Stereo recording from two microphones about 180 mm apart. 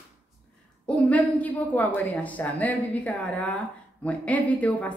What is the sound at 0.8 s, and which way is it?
A woman's voice, 5° left (ahead or behind).